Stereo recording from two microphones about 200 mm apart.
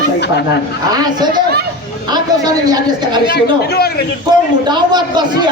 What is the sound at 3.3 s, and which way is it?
Speech, 55° left (ahead or behind).